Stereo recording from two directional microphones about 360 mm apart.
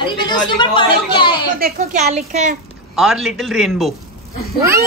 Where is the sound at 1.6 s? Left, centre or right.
Right.